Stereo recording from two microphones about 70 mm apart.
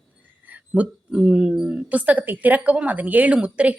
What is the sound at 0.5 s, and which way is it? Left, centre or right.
Speech, centre.